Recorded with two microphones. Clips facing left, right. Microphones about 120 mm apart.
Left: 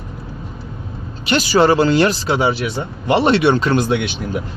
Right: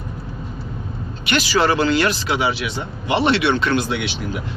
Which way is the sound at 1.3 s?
40° left (ahead or behind).